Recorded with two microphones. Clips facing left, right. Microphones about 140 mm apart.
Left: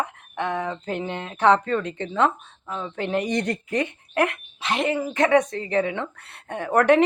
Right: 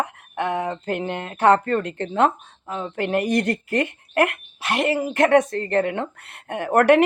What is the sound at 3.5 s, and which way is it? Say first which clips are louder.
Speech: right 3 dB; 75° right (ahead or behind).